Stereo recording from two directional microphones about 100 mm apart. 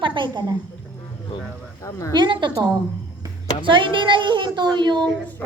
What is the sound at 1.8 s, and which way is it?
Speech, 30° left (ahead or behind).